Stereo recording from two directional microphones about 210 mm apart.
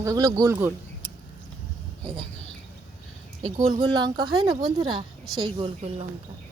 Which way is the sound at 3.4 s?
30° right (ahead or behind).